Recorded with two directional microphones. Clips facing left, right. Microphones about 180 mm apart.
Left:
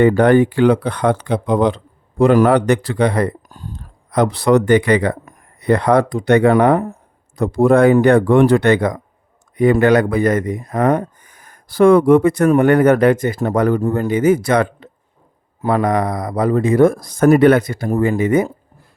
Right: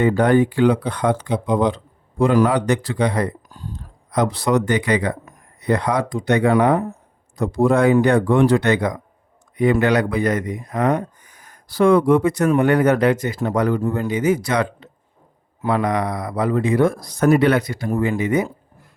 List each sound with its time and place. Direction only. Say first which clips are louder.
0.0 s speech: left 4 dB; 65° left (ahead or behind); by 18.5 s 50° left (ahead or behind)